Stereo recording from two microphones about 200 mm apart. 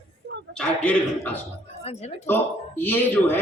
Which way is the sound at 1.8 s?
30° left (ahead or behind).